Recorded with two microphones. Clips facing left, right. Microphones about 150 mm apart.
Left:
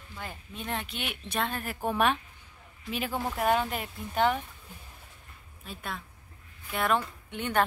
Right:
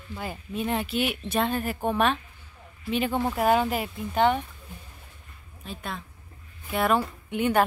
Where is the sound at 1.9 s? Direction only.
10° left (ahead or behind).